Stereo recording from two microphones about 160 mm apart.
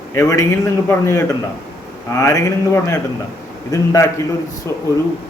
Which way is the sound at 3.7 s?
20° left (ahead or behind).